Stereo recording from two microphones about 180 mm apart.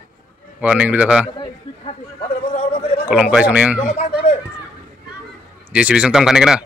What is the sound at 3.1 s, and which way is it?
Speech, 5° right (ahead or behind).